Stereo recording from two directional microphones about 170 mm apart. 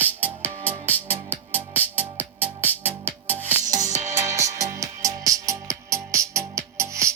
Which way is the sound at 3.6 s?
45° right (ahead or behind).